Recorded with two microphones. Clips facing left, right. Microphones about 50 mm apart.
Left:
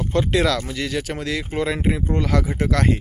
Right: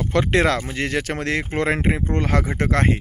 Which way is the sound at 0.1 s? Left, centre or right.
Right.